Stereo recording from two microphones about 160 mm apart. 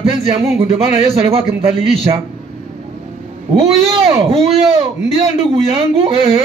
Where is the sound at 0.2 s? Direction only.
40° right (ahead or behind).